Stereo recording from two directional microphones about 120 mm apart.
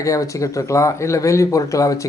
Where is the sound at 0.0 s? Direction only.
25° left (ahead or behind).